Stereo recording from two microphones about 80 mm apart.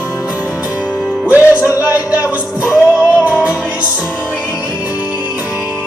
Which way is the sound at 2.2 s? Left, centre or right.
Left.